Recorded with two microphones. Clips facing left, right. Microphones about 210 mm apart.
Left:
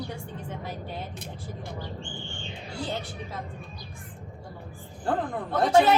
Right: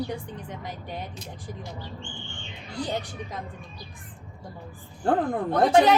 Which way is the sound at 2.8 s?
15° right (ahead or behind).